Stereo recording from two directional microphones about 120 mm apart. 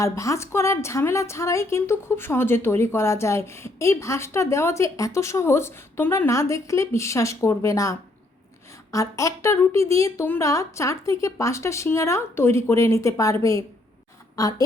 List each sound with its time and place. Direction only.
0.0 s speech: 25° left (ahead or behind)